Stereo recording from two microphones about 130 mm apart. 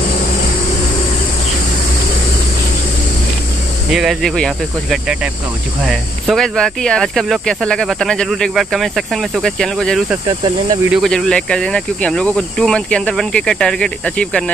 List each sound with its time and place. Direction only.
3.9 s speech: 5° right (ahead or behind)
10.2 s speech: 35° right (ahead or behind)
10.9 s speech: centre (ahead or behind)